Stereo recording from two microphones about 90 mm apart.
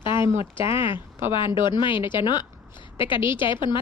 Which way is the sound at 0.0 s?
65° left (ahead or behind).